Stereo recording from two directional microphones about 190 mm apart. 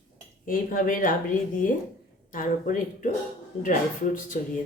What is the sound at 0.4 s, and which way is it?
Speech, 45° left (ahead or behind).